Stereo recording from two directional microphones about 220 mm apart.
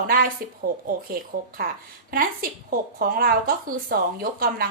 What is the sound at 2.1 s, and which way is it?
A woman's voice, 40° right (ahead or behind).